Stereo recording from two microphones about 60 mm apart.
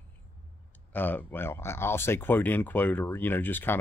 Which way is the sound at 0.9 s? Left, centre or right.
Left.